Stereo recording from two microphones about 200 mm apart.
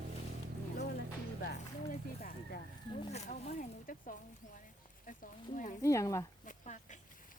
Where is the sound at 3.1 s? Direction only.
35° left (ahead or behind).